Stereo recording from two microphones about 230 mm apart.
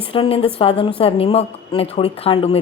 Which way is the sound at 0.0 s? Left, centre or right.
Left.